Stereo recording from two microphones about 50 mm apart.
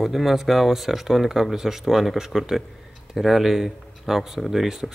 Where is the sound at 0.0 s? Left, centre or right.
Centre.